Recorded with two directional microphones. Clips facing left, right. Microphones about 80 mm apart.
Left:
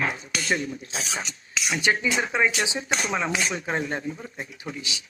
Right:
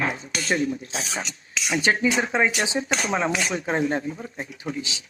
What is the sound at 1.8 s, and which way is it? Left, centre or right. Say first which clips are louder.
Speech: right 2 dB; right.